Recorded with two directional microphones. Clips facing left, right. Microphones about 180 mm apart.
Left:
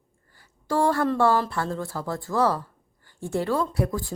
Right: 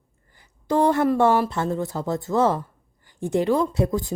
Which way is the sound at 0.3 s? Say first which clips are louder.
Right 3 dB; 20° right (ahead or behind).